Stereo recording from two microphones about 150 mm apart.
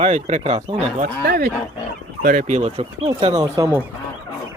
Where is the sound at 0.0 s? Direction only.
45° right (ahead or behind).